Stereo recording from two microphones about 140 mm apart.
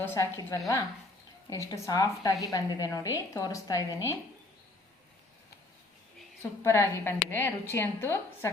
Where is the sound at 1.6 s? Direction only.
25° left (ahead or behind).